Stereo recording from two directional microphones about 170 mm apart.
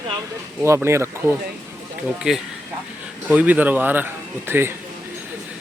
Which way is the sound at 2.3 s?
5° right (ahead or behind).